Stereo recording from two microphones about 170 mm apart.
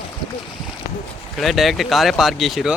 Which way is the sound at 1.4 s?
Centre (ahead or behind).